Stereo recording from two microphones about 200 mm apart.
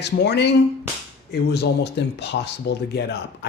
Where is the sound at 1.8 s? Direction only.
55° left (ahead or behind).